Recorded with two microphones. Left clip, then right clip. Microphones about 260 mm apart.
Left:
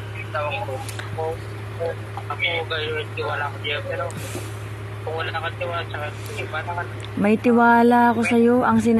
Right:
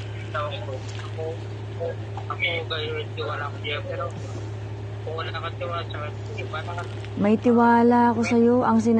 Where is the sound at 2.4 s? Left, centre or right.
Centre.